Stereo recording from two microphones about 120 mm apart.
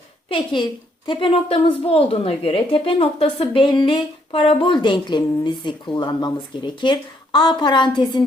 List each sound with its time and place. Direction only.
0.3 s a woman's voice: 45° left (ahead or behind)
1.3 s a woman's voice: 55° left (ahead or behind)